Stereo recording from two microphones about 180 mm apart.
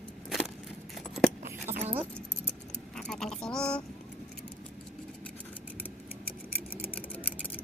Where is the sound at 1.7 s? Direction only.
45° right (ahead or behind).